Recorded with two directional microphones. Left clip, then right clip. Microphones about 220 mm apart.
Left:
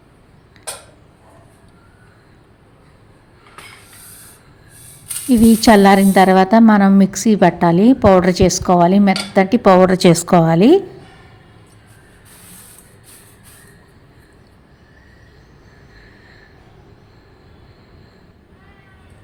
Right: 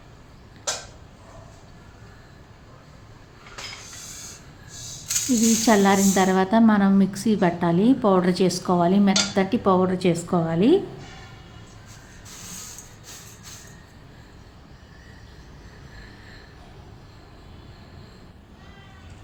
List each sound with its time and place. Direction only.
5.6 s a woman's voice: 40° left (ahead or behind)